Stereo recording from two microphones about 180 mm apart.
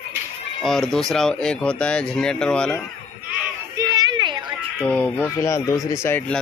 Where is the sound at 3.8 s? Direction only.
20° right (ahead or behind).